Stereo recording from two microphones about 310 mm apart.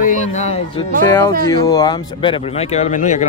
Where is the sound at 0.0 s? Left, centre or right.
Left.